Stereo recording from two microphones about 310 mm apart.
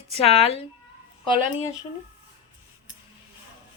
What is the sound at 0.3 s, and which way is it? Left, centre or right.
Speech, centre.